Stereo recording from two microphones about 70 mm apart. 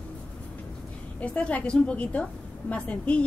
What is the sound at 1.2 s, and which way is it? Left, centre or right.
A woman's voice, centre.